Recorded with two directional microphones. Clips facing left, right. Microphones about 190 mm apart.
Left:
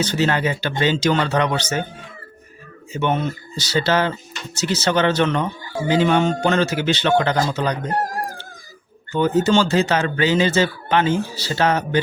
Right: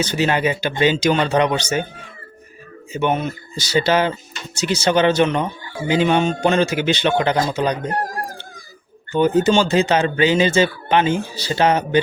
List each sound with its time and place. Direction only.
0.0 s speech: 15° right (ahead or behind)
2.9 s speech: 10° right (ahead or behind)
9.1 s speech: 15° right (ahead or behind)